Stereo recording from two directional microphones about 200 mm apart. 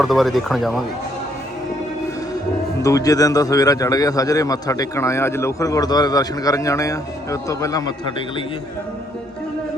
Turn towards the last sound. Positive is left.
turn(degrees=15)  # may be behind; listen again after turning